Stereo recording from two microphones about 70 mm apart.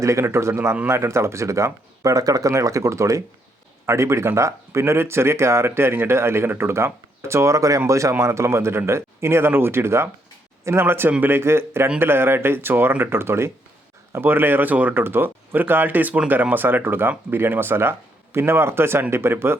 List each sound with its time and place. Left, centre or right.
0.0 s speech: right